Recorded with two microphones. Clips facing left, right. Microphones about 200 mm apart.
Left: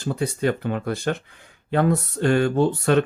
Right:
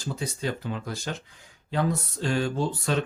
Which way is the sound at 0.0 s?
60° left (ahead or behind).